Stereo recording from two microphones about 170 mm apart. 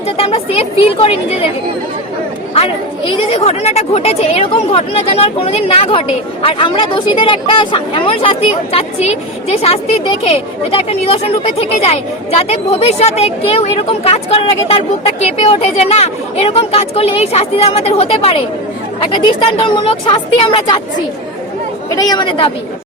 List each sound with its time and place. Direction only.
0.2 s speech: 35° left (ahead or behind)
2.6 s a woman's voice: 35° left (ahead or behind)
21.8 s a woman's voice: 20° left (ahead or behind)